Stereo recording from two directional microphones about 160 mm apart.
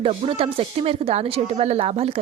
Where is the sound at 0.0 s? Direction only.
35° right (ahead or behind).